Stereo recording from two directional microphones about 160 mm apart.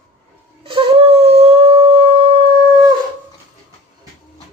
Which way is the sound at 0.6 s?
35° right (ahead or behind).